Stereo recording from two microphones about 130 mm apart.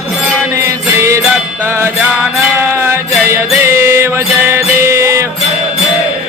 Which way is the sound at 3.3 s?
20° right (ahead or behind).